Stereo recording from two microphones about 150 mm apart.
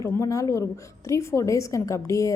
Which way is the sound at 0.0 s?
20° left (ahead or behind).